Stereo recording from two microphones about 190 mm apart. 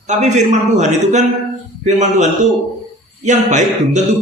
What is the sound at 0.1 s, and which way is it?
A man's voice, 40° right (ahead or behind).